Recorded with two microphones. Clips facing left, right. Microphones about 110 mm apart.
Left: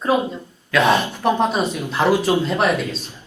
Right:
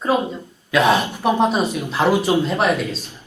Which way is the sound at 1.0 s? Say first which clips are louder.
Right 1 dB; 15° right (ahead or behind).